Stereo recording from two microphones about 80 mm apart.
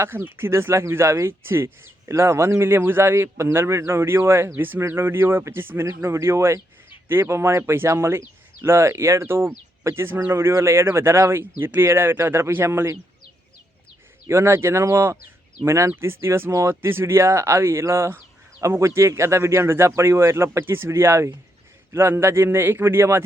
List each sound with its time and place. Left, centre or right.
0.0 s speech: right
14.3 s a man's voice: right